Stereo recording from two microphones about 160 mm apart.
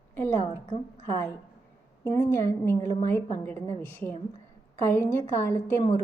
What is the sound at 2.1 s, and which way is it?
A woman's voice, 15° left (ahead or behind).